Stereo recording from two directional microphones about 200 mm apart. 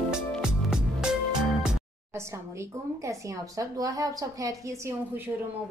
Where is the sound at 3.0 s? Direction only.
15° right (ahead or behind).